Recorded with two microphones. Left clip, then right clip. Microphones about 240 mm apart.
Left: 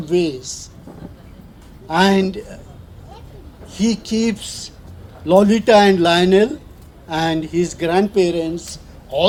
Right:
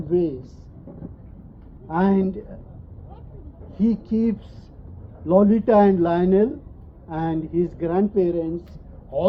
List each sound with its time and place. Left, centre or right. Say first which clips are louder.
0.0 s speech: left 4 dB; left
1.9 s speech: left 7 dB; left
3.7 s speech: left 3 dB; left